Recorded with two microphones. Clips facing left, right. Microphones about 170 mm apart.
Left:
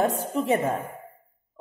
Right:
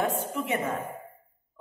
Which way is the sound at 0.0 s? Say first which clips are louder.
Left 4 dB; 35° left (ahead or behind).